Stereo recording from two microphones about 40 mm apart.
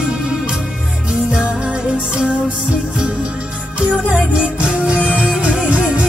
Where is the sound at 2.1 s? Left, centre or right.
Right.